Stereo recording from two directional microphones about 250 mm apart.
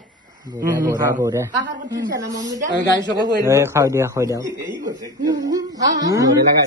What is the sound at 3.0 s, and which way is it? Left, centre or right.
Speech, centre.